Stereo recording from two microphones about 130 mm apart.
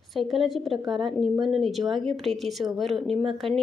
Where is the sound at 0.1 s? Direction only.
Centre (ahead or behind).